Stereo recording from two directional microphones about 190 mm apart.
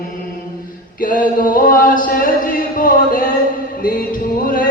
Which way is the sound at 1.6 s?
45° left (ahead or behind).